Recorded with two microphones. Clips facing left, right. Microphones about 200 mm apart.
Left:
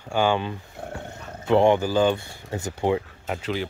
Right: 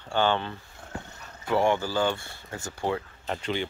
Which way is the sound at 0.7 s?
60° left (ahead or behind).